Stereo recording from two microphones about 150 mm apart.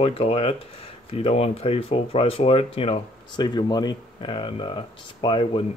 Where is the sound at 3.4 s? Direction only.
30° left (ahead or behind).